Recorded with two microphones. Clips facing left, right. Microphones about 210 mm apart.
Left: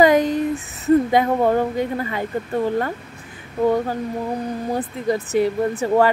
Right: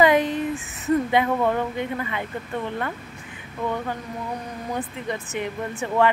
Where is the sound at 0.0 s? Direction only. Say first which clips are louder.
Left 4 dB; 40° left (ahead or behind).